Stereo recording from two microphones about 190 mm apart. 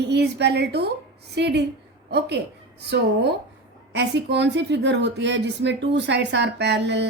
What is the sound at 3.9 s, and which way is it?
Speech, 65° right (ahead or behind).